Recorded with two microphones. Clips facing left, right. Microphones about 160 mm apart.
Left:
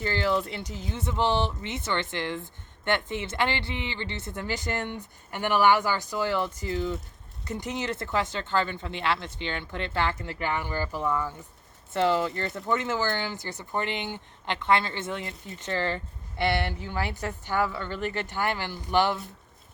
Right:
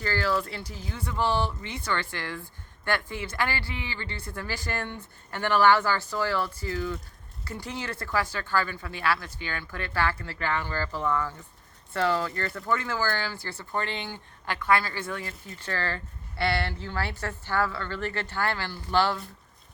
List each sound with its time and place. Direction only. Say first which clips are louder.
0.0 s a woman's voice: left 1 dB; 20° left (ahead or behind)